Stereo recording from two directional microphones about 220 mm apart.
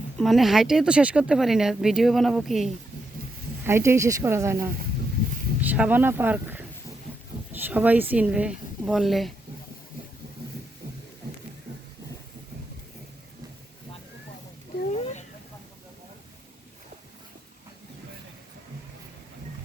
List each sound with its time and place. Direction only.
0.2 s speech: centre (ahead or behind)
3.7 s speech: 10° right (ahead or behind)
14.9 s a sound: 30° left (ahead or behind)